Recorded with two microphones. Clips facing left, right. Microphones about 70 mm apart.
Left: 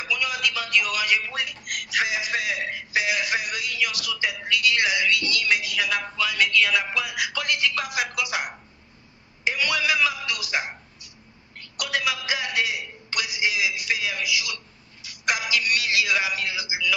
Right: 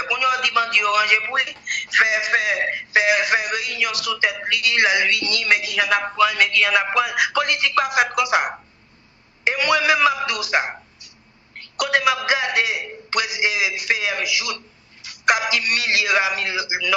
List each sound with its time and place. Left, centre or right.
0.0 s a woman's voice: right